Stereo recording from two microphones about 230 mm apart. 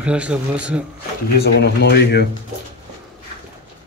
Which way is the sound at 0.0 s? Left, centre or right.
Centre.